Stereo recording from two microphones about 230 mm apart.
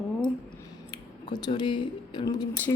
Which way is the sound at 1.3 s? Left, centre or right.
Centre.